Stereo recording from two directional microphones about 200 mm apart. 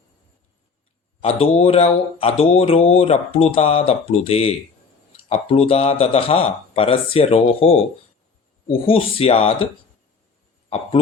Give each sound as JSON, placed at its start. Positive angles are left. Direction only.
{"t": 1.2, "sound": "speech", "side_deg": 30}
{"t": 8.9, "sound": "speech", "side_deg": 30}